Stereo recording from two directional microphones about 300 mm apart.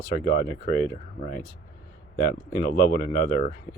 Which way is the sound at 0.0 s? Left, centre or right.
Left.